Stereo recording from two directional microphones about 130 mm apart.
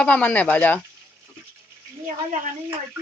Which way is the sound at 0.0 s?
10° left (ahead or behind).